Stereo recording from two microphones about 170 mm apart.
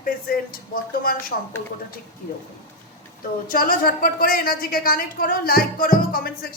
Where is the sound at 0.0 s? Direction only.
60° left (ahead or behind).